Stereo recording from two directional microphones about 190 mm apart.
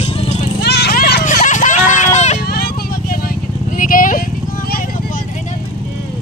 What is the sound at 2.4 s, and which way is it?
Vehicle, 55° left (ahead or behind).